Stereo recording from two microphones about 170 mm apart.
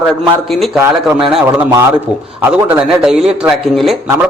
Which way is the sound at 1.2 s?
5° right (ahead or behind).